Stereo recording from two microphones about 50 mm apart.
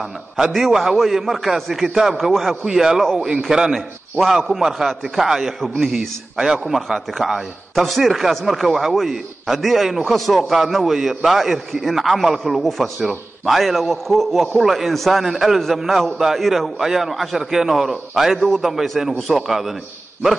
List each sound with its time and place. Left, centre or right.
0.5 s a man's voice: centre
6.3 s a man's voice: centre
6.6 s a man's voice: centre